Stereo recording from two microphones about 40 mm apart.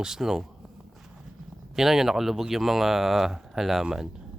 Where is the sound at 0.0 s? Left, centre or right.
Centre.